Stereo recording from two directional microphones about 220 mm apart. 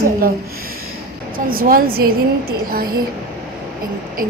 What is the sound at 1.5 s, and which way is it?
Speech, 40° right (ahead or behind).